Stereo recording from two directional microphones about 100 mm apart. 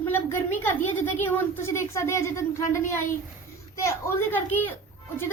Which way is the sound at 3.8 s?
30° left (ahead or behind).